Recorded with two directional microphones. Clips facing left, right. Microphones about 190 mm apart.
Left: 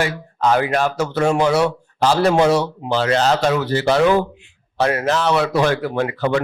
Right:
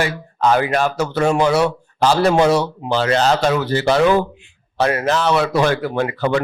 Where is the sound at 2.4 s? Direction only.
45° left (ahead or behind).